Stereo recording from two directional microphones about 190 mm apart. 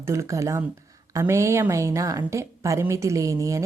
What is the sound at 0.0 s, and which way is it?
A woman's voice, 15° right (ahead or behind).